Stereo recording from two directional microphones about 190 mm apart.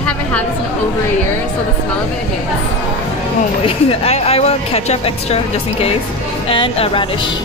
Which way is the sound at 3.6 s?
30° left (ahead or behind).